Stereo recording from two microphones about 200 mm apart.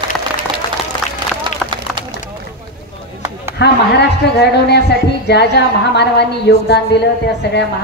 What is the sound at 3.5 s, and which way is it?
A woman's voice, 55° left (ahead or behind).